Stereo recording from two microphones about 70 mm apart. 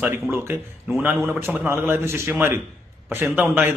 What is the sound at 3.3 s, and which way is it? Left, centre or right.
Speech, right.